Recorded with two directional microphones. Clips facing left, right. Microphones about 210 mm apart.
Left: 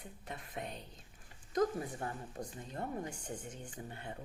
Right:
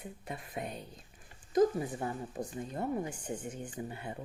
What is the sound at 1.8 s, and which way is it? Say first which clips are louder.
Speech: right 5 dB; 20° right (ahead or behind).